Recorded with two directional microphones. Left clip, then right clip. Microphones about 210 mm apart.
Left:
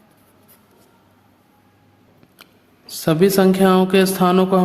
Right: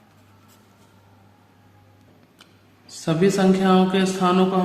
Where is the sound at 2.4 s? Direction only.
45° left (ahead or behind).